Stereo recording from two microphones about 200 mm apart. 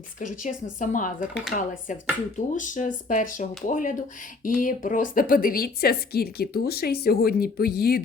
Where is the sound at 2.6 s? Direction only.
40° left (ahead or behind).